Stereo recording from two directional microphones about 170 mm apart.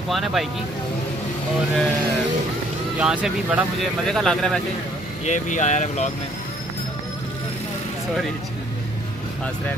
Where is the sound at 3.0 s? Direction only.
5° right (ahead or behind).